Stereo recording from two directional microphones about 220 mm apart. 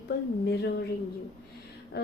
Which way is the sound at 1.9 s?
45° left (ahead or behind).